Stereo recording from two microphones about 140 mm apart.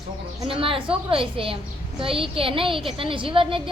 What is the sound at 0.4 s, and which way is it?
A woman's voice, 40° right (ahead or behind).